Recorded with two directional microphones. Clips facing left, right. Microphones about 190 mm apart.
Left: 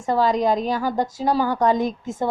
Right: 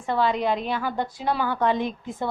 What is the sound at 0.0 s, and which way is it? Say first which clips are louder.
A woman's voice: left 4 dB; 40° left (ahead or behind).